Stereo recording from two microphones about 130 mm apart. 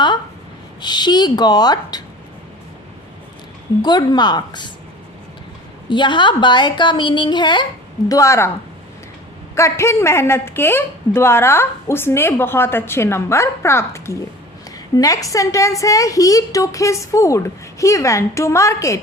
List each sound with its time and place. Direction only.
0.8 s a woman's voice: 35° left (ahead or behind)
3.8 s a woman's voice: 35° left (ahead or behind)
5.9 s a woman's voice: 35° left (ahead or behind)
8.1 s a woman's voice: 20° left (ahead or behind)
9.6 s a woman's voice: 20° left (ahead or behind)